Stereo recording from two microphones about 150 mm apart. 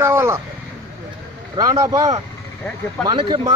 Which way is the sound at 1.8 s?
25° right (ahead or behind).